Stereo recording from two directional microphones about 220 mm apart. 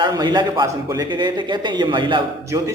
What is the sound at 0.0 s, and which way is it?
A man's voice, 20° right (ahead or behind).